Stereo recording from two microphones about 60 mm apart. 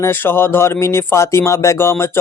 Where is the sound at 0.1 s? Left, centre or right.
Left.